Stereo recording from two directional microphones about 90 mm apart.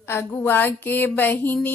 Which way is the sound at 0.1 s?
25° left (ahead or behind).